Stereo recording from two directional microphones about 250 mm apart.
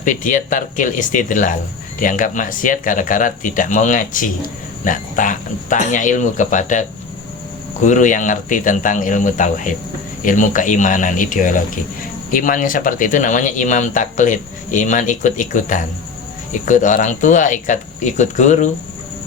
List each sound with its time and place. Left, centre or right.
0.0 s speech: left
7.9 s speech: left